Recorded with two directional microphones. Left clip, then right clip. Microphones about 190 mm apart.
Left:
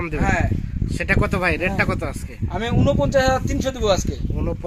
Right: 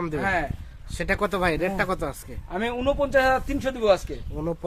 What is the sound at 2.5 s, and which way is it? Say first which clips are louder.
A man's voice: left 3 dB; 35° left (ahead or behind).